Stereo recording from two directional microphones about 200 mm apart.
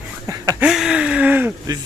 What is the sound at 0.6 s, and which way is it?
Speech, centre (ahead or behind).